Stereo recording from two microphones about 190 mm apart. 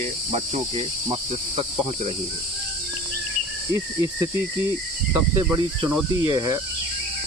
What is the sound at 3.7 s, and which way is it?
Speech, 20° right (ahead or behind).